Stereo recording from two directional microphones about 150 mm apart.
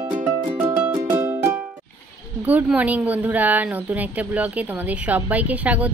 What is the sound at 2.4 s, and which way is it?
A woman's voice, 10° right (ahead or behind).